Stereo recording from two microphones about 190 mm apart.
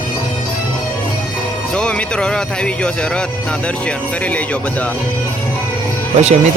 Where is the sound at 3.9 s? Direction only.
5° left (ahead or behind).